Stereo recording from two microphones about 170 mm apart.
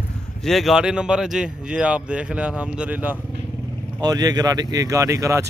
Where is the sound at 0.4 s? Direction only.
Centre (ahead or behind).